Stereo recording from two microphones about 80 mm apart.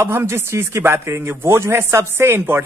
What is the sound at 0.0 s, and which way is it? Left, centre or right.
Speech, right.